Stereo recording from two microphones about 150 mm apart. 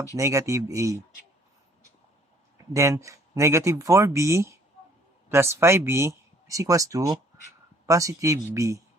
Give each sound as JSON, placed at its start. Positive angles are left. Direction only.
{"t": 0.2, "sound": "speech", "side_deg": -20}
{"t": 2.7, "sound": "speech", "side_deg": -20}